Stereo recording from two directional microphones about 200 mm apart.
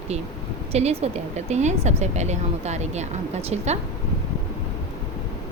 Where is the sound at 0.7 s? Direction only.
30° right (ahead or behind).